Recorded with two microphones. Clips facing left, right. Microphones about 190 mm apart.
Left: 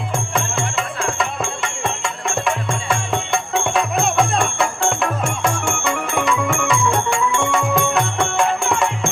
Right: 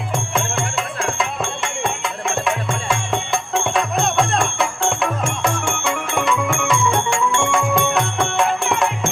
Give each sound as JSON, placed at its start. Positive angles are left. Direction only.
{"t": 0.3, "sound": "music", "side_deg": 0}